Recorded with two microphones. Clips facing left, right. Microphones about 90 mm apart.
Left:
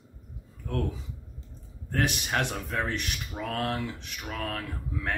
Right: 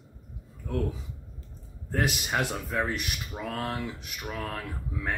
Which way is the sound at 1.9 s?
5° right (ahead or behind).